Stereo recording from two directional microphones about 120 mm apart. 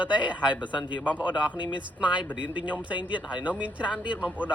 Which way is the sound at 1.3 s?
40° left (ahead or behind).